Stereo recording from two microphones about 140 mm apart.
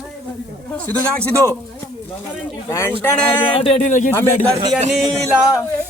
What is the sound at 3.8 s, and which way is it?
Speech, 65° left (ahead or behind).